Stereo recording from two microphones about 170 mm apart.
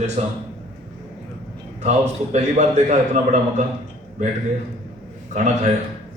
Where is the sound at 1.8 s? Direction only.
40° right (ahead or behind).